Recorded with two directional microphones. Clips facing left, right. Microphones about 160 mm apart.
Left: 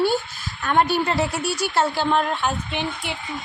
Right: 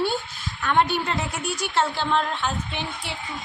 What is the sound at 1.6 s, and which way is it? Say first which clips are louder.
Speech: left 2 dB; 40° left (ahead or behind).